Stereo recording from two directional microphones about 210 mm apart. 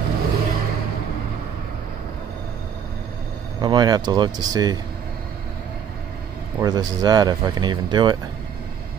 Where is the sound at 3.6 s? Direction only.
20° right (ahead or behind).